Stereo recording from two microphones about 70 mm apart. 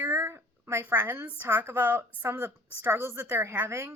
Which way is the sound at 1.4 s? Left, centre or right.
Right.